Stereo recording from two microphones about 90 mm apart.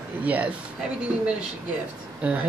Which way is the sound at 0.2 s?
15° right (ahead or behind).